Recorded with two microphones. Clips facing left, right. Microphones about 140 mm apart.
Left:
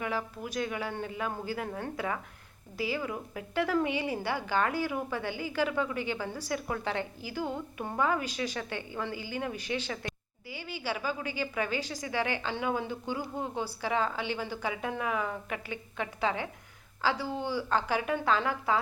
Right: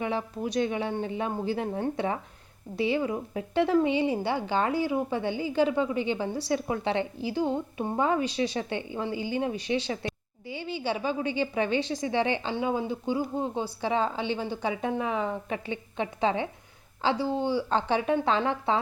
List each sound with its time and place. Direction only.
0.0 s a woman's voice: 25° right (ahead or behind)